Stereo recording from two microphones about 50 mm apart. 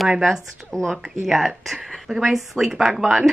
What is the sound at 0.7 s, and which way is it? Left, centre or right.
A woman's voice, centre.